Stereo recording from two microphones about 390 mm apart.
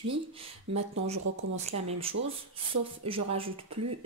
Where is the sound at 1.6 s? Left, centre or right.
Centre.